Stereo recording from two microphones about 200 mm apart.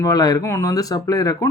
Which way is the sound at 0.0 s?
20° left (ahead or behind).